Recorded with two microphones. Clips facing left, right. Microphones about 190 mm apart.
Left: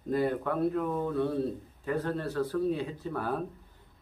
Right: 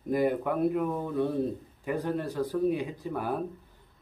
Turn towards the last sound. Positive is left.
turn(degrees=-15)  # may be behind; listen again after turning